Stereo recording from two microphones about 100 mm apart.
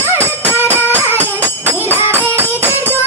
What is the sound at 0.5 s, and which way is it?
Music, 20° right (ahead or behind).